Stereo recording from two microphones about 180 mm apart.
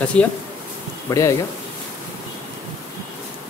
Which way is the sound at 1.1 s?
15° left (ahead or behind).